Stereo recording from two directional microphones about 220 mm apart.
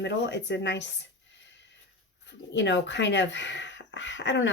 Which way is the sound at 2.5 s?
55° left (ahead or behind).